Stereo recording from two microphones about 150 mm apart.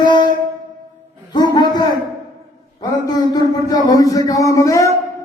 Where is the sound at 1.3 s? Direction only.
25° left (ahead or behind).